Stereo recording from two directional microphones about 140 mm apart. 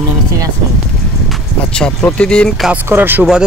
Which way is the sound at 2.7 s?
15° right (ahead or behind).